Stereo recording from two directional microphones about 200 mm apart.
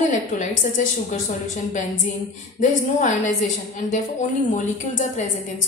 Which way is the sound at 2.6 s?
35° left (ahead or behind).